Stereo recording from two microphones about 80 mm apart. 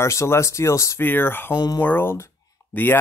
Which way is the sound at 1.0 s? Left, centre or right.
Left.